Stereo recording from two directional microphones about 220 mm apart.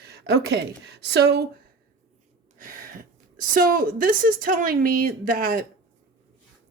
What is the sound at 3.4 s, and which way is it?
A woman's voice, 40° right (ahead or behind).